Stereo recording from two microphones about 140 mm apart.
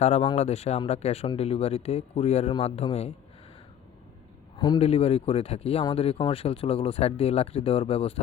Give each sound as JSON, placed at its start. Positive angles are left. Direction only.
{"t": 0.0, "sound": "speech", "side_deg": 50}
{"t": 4.5, "sound": "a man's voice", "side_deg": 30}
{"t": 4.8, "sound": "speech", "side_deg": 45}